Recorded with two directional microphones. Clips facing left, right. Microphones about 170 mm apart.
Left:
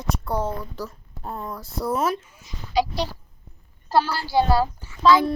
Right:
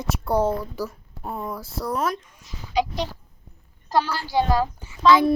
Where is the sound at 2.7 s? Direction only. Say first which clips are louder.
Left 1 dB; 35° left (ahead or behind).